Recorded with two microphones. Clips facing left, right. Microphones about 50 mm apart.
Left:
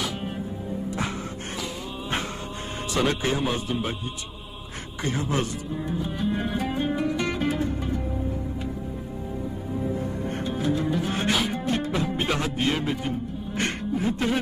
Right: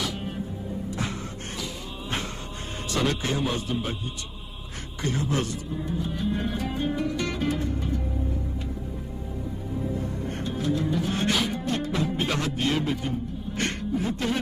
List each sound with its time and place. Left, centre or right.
1.6 s music: left
2.9 s speech: centre
5.0 s speech: centre
6.0 s music: centre
10.2 s music: centre